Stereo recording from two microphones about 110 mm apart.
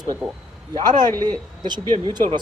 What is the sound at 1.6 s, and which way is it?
Speech, 45° right (ahead or behind).